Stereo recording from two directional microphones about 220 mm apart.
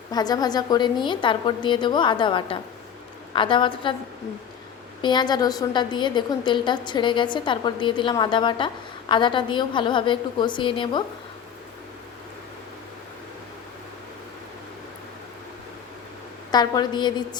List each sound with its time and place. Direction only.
0.1 s a woman's voice: 15° left (ahead or behind)
5.0 s a woman's voice: 20° left (ahead or behind)
16.5 s a woman's voice: 20° left (ahead or behind)